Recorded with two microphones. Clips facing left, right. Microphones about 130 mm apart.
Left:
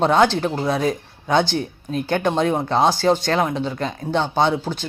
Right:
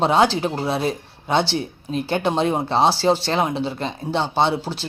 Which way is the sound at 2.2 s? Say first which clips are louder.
Left 1 dB; 30° right (ahead or behind).